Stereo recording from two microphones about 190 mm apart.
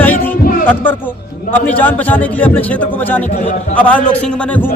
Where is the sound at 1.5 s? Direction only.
10° left (ahead or behind).